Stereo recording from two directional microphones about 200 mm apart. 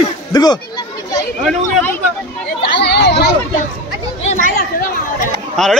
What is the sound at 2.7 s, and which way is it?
Chatter, 55° left (ahead or behind).